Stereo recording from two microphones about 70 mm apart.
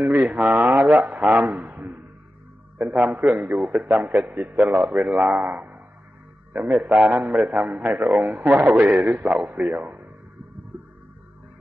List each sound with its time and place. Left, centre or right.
0.0 s a man's voice: right